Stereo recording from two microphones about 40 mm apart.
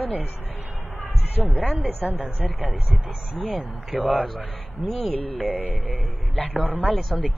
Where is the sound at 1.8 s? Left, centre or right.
Right.